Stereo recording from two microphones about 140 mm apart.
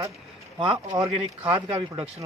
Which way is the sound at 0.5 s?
35° right (ahead or behind).